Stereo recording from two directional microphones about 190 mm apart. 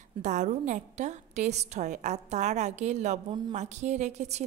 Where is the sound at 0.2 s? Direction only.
40° right (ahead or behind).